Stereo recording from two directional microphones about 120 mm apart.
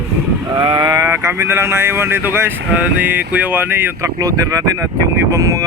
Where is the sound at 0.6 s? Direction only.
35° right (ahead or behind).